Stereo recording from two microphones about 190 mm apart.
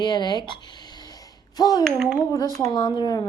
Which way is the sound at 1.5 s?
20° left (ahead or behind).